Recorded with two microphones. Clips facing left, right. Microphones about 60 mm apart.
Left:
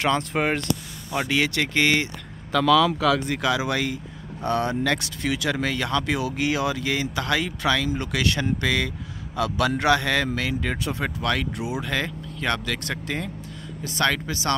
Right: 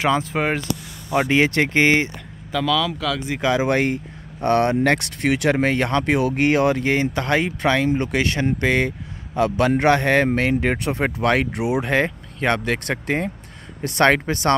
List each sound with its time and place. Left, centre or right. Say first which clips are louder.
0.0 s speech: right 3 dB; centre
1.1 s speech: right 6 dB; right
2.5 s speech: left 3 dB; centre
3.3 s speech: right 4 dB; right
11.8 s speech: right 7 dB; right
13.8 s speech: right 7 dB; right